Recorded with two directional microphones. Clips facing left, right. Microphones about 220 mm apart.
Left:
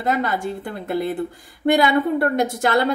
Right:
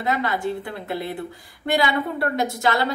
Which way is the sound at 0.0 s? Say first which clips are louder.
Left 2 dB; 45° left (ahead or behind).